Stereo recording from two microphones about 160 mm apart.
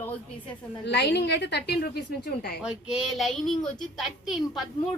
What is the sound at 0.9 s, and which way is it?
A woman's voice, 90° left.